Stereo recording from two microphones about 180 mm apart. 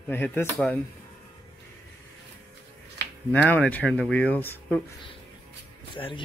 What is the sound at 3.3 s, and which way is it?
Speech, 10° left (ahead or behind).